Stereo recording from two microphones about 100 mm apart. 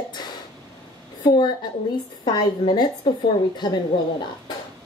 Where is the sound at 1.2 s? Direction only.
50° left (ahead or behind).